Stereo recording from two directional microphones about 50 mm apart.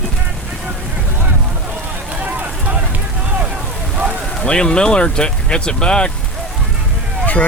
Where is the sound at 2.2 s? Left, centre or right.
Right.